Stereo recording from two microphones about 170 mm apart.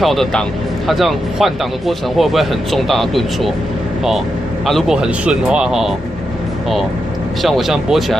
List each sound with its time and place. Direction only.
0.0 s speech: centre (ahead or behind)
4.6 s speech: centre (ahead or behind)
7.4 s speech: centre (ahead or behind)